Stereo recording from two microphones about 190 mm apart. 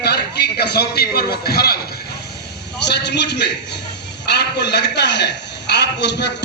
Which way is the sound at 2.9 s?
65° left (ahead or behind).